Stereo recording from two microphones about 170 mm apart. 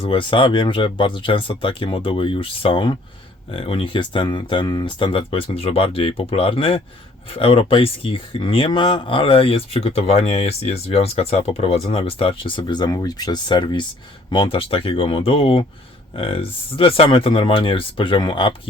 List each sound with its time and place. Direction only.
0.0 s speech: 30° left (ahead or behind)